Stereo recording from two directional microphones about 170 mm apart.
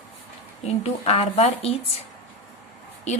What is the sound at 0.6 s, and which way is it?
Speech, 35° left (ahead or behind).